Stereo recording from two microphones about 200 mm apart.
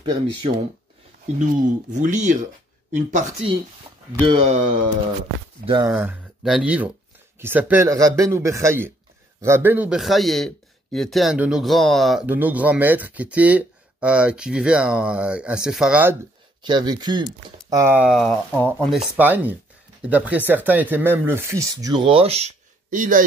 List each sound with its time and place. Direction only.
1.2 s speech: 40° right (ahead or behind)
4.5 s speech: 25° right (ahead or behind)
5.7 s speech: 15° right (ahead or behind)
16.6 s speech: 20° right (ahead or behind); by 23.2 s 40° right (ahead or behind)